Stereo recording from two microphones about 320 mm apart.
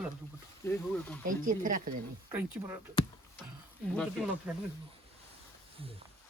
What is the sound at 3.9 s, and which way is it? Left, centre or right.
Speech, centre.